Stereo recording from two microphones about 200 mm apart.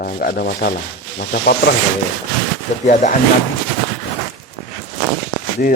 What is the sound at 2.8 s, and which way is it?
Speech, 40° left (ahead or behind).